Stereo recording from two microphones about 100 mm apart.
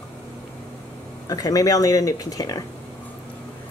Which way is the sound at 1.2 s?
40° left (ahead or behind).